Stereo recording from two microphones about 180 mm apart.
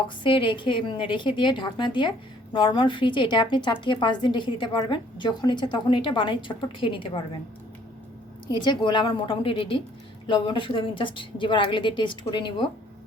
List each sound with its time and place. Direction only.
0.2 s a woman's voice: 30° left (ahead or behind)
8.4 s a woman's voice: 25° left (ahead or behind)